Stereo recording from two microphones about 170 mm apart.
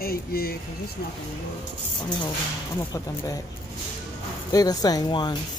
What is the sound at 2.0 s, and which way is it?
Speech, 25° left (ahead or behind).